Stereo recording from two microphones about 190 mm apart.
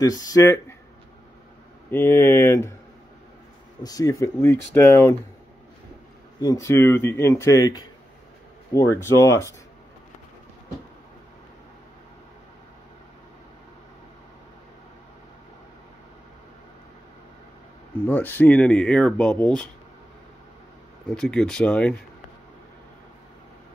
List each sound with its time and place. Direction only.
0.0 s speech: 20° left (ahead or behind)
1.9 s speech: 10° left (ahead or behind)
3.8 s speech: 20° left (ahead or behind)
6.4 s speech: 15° left (ahead or behind)
18.0 s speech: 10° left (ahead or behind)
21.1 s speech: 5° left (ahead or behind)